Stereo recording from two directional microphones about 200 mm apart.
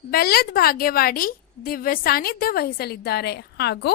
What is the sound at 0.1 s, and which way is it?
A woman's voice, 50° left (ahead or behind).